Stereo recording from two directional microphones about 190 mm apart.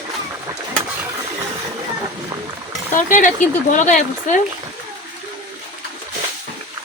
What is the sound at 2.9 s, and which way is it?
Speech, 45° left (ahead or behind).